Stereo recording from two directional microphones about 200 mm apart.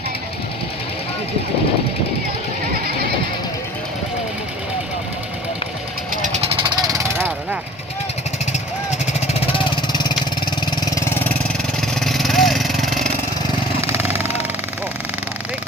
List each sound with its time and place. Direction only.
6.6 s vehicle: 20° right (ahead or behind)
9.2 s vehicle: 30° left (ahead or behind)
10.9 s vehicle: 10° left (ahead or behind)
11.8 s vehicle: centre (ahead or behind)